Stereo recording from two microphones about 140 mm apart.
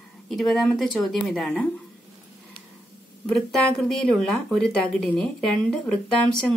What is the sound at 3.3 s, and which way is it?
Speech, centre (ahead or behind).